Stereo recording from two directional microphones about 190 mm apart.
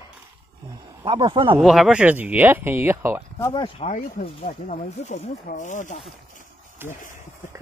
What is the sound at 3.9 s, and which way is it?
Speech, 45° left (ahead or behind).